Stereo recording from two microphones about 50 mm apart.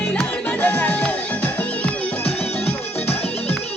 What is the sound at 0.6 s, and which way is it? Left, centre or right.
Music, left.